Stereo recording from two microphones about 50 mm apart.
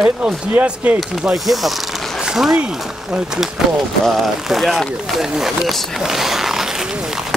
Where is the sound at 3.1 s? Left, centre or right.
Centre.